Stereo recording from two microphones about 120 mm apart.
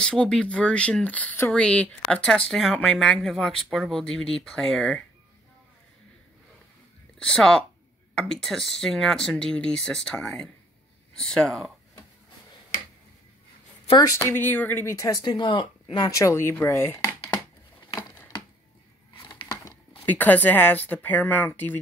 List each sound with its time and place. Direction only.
0.0 s speech: 5° left (ahead or behind)
7.2 s speech: 5° left (ahead or behind)
13.9 s speech: 30° left (ahead or behind)
16.2 s speech: 25° left (ahead or behind)
19.1 s a sound: 35° left (ahead or behind)
20.1 s speech: 15° left (ahead or behind)